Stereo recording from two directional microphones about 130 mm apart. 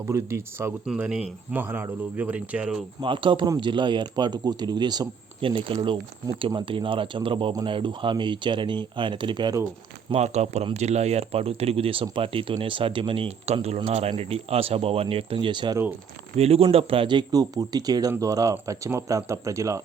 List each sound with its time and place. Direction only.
0.1 s speech: 20° right (ahead or behind)
0.9 s speech: 5° right (ahead or behind)
3.0 s speech: 40° right (ahead or behind)
10.1 s speech: 60° right (ahead or behind); by 15.8 s 35° right (ahead or behind)
16.4 s speech: 50° right (ahead or behind); by 19.8 s 25° right (ahead or behind)